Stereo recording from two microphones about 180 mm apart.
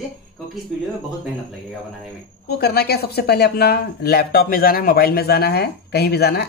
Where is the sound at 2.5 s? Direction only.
60° left (ahead or behind).